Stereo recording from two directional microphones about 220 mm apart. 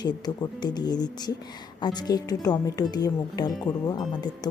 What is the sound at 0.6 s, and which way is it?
A woman's voice, 20° left (ahead or behind).